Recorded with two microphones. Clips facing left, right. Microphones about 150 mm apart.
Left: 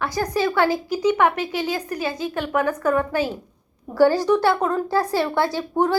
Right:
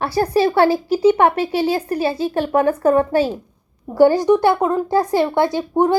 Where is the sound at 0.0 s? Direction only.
30° right (ahead or behind).